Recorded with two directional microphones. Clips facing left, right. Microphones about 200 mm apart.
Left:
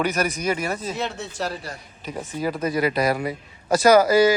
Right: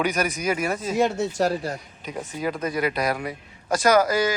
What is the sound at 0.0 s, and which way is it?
Speech, centre (ahead or behind).